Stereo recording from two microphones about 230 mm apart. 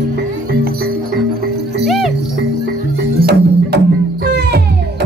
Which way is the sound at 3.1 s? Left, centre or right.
Right.